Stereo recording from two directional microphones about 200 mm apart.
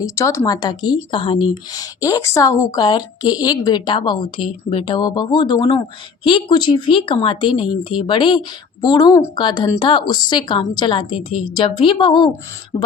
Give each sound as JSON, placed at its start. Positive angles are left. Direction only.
{"t": 0.0, "sound": "a woman's voice", "side_deg": 15}